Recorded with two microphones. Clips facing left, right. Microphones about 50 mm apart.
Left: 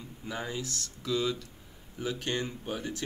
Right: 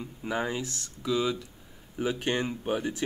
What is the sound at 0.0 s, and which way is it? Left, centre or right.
Speech, right.